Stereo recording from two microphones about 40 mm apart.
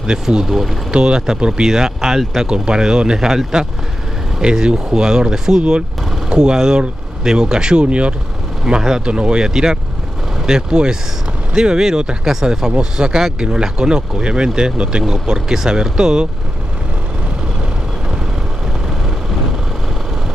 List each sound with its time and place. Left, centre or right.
0.0 s speech: right
0.5 s speech: centre
0.9 s speech: right
4.4 s speech: right
8.6 s speech: centre